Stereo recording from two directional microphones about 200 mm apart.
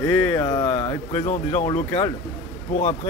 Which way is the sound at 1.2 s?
35° left (ahead or behind).